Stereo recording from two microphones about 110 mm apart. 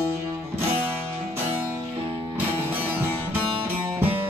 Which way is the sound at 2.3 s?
15° right (ahead or behind).